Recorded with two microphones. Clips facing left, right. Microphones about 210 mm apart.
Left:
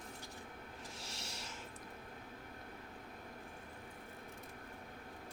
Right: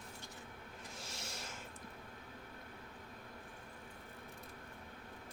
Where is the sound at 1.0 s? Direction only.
50° right (ahead or behind).